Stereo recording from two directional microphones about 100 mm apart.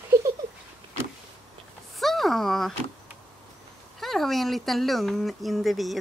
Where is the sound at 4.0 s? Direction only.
Centre (ahead or behind).